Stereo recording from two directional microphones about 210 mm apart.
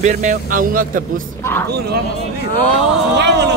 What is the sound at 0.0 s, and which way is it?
Speech, 35° right (ahead or behind).